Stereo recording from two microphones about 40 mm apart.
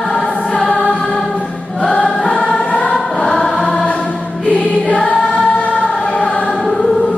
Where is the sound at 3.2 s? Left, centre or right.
Centre.